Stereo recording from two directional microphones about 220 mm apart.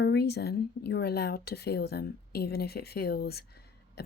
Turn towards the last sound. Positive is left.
turn(degrees=45)  # may be behind; listen again after turning